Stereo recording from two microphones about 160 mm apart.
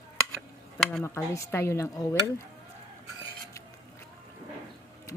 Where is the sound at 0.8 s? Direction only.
5° left (ahead or behind).